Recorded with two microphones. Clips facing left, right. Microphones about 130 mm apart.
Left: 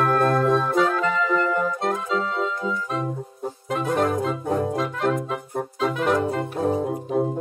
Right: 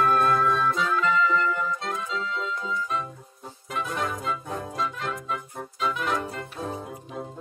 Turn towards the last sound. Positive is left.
turn(degrees=50)  # may be behind; listen again after turning